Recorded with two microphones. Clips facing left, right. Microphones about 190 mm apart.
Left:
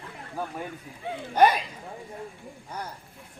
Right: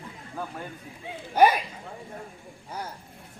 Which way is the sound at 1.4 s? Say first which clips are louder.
Right 1 dB; 10° right (ahead or behind).